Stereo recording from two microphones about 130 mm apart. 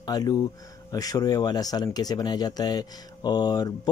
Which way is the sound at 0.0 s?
30° left (ahead or behind).